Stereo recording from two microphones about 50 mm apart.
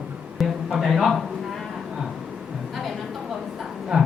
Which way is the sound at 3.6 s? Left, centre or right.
Centre.